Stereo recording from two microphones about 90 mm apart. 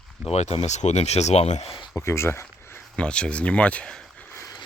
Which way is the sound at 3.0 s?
10° left (ahead or behind).